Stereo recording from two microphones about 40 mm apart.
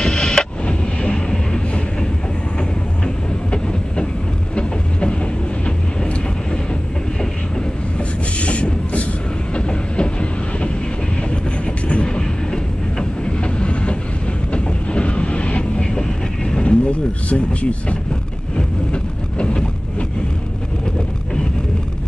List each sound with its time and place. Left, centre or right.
0.0 s vehicle: left
3.5 s train: left
8.4 s a sound: left
9.5 s train: left
11.6 s train: left
13.2 s train: left
15.8 s vehicle: centre